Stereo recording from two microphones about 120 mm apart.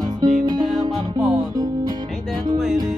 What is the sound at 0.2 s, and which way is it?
Music, 35° right (ahead or behind).